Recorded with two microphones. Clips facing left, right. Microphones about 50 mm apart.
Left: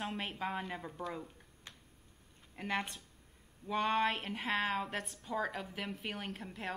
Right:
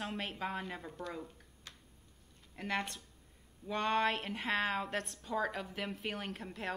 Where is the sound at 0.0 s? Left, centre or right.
Centre.